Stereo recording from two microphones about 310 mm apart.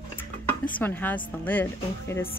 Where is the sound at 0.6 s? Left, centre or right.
Centre.